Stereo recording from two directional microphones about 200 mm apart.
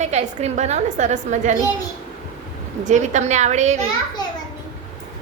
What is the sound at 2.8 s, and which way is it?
A woman's voice, 35° right (ahead or behind).